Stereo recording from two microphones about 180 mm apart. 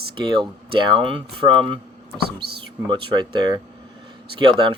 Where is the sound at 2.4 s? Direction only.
65° right (ahead or behind).